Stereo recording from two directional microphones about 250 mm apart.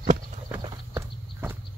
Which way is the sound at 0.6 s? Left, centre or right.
Centre.